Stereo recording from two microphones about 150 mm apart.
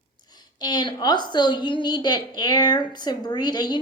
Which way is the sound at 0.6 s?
30° left (ahead or behind).